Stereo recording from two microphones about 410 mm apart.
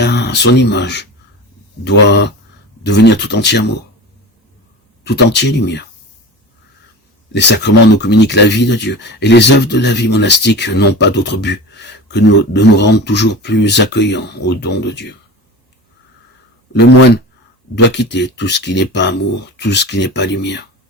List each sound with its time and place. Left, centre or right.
0.0 s speech: left
5.0 s speech: left
7.3 s speech: left
16.7 s speech: left